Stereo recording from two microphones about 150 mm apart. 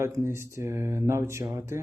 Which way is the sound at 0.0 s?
20° right (ahead or behind).